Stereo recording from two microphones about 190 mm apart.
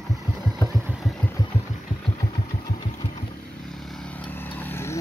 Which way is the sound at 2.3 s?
20° left (ahead or behind).